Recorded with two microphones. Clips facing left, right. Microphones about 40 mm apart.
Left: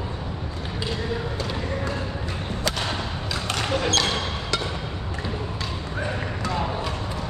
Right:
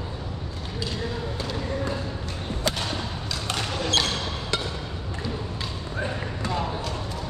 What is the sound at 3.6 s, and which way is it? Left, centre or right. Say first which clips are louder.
Basketball bounce: left 5 dB; left.